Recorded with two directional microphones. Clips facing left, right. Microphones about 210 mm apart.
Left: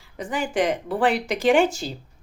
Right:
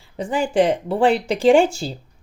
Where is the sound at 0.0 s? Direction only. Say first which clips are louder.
Right 5 dB; 30° right (ahead or behind).